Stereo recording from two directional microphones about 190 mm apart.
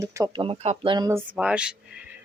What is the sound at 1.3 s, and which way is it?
Speech, 5° right (ahead or behind).